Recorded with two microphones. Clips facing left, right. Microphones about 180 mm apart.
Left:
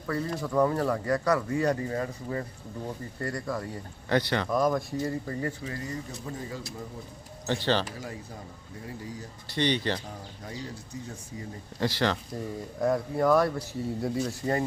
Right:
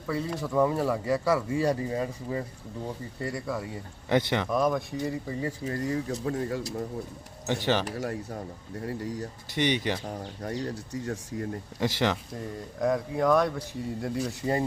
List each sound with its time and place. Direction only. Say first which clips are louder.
0.1 s speech: even; 5° right (ahead or behind)
4.1 s speech: right 1 dB; 20° right (ahead or behind)
4.4 s speech: even; centre (ahead or behind)
5.3 s speech: even; 10° right (ahead or behind)
5.9 s speech: right 7 dB; 65° right (ahead or behind)
7.4 s speech: even; 15° right (ahead or behind)
7.9 s speech: right 7 dB; 70° right (ahead or behind)
9.6 s speech: even; 15° right (ahead or behind)
10.4 s speech: right 7 dB; 70° right (ahead or behind)
11.8 s speech: even; 20° right (ahead or behind)
12.3 s speech: left 2 dB; centre (ahead or behind)